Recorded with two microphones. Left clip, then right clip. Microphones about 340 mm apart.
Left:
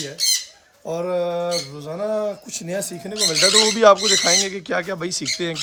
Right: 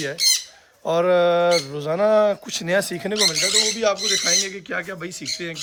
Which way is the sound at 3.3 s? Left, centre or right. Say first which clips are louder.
Left 4 dB; left.